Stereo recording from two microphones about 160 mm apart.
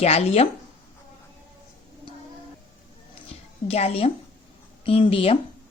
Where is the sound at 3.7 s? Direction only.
40° left (ahead or behind).